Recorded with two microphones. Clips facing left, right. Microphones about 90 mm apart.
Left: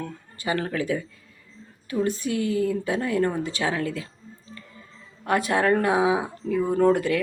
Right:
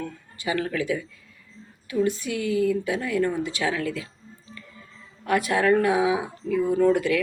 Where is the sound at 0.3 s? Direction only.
35° left (ahead or behind).